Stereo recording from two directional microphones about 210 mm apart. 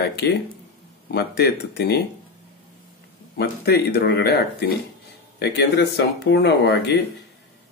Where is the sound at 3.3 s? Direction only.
50° left (ahead or behind).